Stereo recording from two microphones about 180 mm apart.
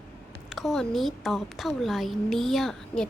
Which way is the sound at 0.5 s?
Centre (ahead or behind).